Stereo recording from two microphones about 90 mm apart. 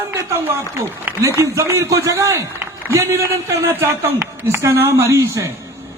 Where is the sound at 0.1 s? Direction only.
30° right (ahead or behind).